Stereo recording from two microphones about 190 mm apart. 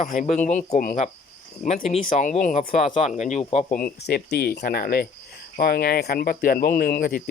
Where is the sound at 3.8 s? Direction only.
55° left (ahead or behind).